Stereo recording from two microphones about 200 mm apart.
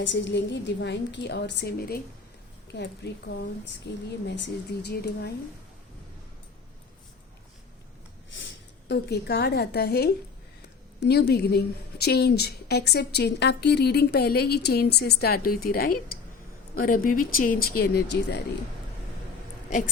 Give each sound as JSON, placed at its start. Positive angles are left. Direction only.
{"t": 0.0, "sound": "a woman's voice", "side_deg": 65}
{"t": 8.9, "sound": "a woman's voice", "side_deg": 55}